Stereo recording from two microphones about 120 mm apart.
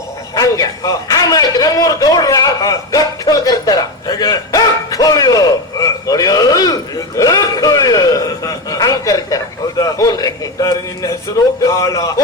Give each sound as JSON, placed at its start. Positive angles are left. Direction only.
{"t": 0.3, "sound": "a man's voice", "side_deg": 30}